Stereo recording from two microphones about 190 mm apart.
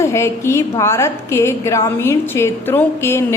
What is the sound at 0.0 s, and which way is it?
A woman's voice, 15° left (ahead or behind).